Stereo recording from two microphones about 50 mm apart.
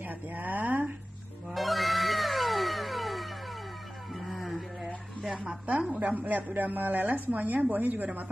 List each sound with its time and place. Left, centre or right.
0.0 s a woman's voice: right
1.5 s cat: centre
4.1 s a sound: centre
5.3 s a woman's voice: centre
5.7 s a woman's voice: right